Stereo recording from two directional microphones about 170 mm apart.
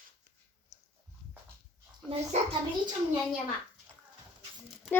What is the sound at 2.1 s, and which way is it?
Speech, 35° right (ahead or behind).